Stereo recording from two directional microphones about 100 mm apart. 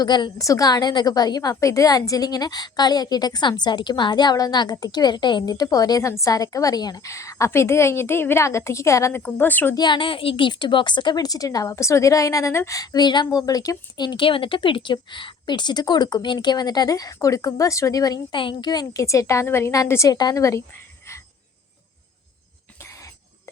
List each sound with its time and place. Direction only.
0.0 s a woman's voice: 50° left (ahead or behind)
0.3 s a woman's voice: 35° left (ahead or behind)
9.2 s a woman's voice: 15° left (ahead or behind)
9.7 s a woman's voice: 50° left (ahead or behind)
18.3 s a woman's voice: 55° left (ahead or behind); by 20.1 s 35° left (ahead or behind)
20.1 s a woman's voice: 45° left (ahead or behind)
20.4 s a woman's voice: 30° left (ahead or behind)